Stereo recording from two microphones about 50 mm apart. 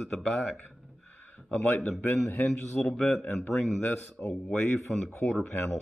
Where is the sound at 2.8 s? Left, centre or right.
Centre.